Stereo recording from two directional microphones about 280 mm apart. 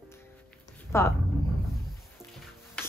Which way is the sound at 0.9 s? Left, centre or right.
Centre.